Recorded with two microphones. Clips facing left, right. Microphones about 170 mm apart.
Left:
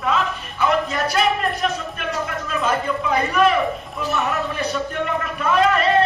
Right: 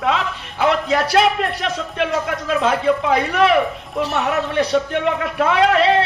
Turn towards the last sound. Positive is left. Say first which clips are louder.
# right 2 dB
turn(degrees=-90)